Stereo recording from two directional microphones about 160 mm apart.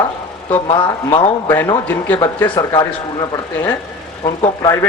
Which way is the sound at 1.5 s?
15° left (ahead or behind).